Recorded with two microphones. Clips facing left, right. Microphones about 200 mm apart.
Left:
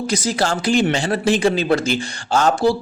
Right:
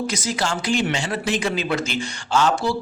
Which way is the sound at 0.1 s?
35° left (ahead or behind).